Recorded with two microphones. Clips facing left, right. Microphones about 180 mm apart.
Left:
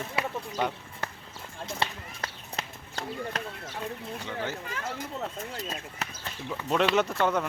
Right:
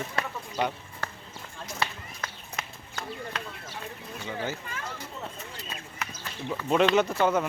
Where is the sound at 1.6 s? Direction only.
30° left (ahead or behind).